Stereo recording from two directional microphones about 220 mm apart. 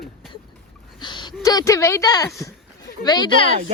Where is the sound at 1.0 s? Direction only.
20° left (ahead or behind).